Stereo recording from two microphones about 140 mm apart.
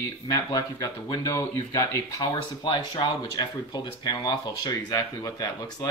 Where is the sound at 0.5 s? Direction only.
25° left (ahead or behind).